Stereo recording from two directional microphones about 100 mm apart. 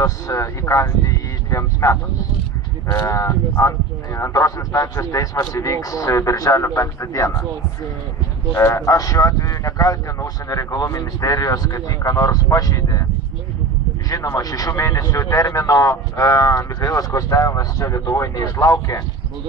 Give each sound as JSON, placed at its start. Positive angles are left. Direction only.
{"t": 0.0, "sound": "speech", "side_deg": 30}
{"t": 3.1, "sound": "speech", "side_deg": 30}
{"t": 8.5, "sound": "speech", "side_deg": 30}
{"t": 14.0, "sound": "speech", "side_deg": 35}